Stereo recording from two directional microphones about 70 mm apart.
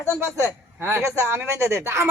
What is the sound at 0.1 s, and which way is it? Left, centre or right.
A man's voice, right.